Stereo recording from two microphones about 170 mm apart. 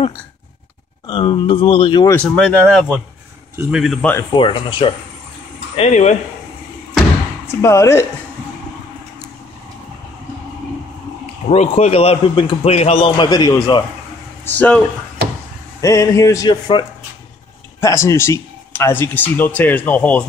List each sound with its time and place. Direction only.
1.0 s speech: 30° left (ahead or behind)
2.2 s speech: 5° left (ahead or behind)
4.0 s a man's voice: 15° left (ahead or behind)
4.3 s speech: 30° left (ahead or behind)
5.8 s speech: 45° left (ahead or behind)
7.4 s a man's voice: 15° left (ahead or behind)
11.4 s a man's voice: 40° left (ahead or behind); by 13.8 s 25° left (ahead or behind)
14.4 s speech: 10° left (ahead or behind)
15.8 s a man's voice: 20° left (ahead or behind)